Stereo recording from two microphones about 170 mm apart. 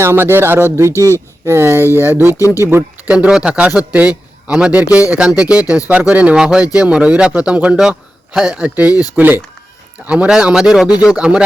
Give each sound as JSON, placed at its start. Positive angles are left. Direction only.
{"t": 0.0, "sound": "a man's voice", "side_deg": -15}
{"t": 0.9, "sound": "speech", "side_deg": 15}
{"t": 1.5, "sound": "a man's voice", "side_deg": -15}